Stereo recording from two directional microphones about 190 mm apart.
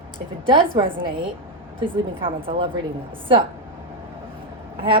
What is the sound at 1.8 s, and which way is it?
Speech, 25° right (ahead or behind).